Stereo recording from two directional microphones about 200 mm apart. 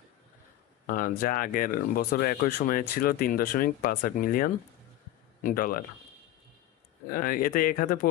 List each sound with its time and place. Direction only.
0.8 s speech: 45° left (ahead or behind)
7.1 s speech: 45° left (ahead or behind)